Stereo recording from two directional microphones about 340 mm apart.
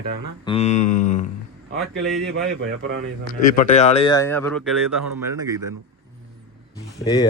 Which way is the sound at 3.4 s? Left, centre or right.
Left.